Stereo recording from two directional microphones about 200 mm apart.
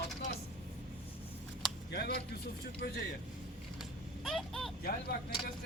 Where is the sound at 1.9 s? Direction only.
55° left (ahead or behind).